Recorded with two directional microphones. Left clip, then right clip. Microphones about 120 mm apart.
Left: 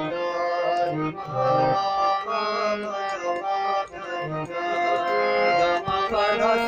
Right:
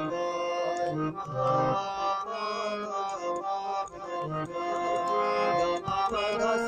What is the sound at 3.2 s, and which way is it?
Accordion, 35° left (ahead or behind).